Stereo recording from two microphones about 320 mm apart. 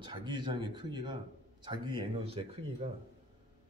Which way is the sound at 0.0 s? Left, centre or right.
Centre.